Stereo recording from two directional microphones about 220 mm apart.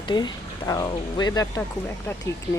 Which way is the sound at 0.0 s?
20° left (ahead or behind).